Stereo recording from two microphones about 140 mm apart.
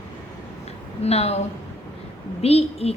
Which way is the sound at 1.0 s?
50° left (ahead or behind).